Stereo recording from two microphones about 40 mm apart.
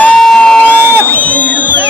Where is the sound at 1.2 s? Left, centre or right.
Left.